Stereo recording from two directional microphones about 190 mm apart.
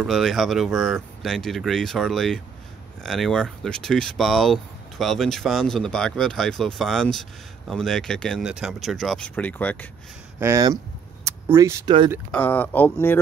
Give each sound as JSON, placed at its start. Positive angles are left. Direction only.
{"t": 0.0, "sound": "speech", "side_deg": 0}
{"t": 10.4, "sound": "speech", "side_deg": -15}
{"t": 12.3, "sound": "speech", "side_deg": 10}